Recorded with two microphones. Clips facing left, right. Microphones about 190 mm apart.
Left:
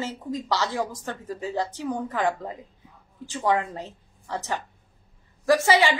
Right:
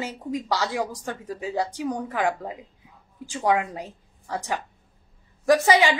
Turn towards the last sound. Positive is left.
turn(degrees=-15)  # may be behind; listen again after turning